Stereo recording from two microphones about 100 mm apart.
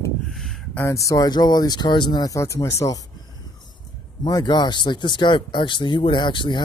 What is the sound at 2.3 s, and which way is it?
Speech, 30° left (ahead or behind).